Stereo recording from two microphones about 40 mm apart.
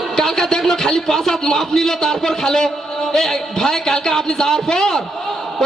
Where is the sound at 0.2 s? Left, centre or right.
Centre.